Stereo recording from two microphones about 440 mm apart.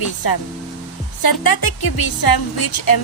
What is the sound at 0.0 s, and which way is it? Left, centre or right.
Speech, left.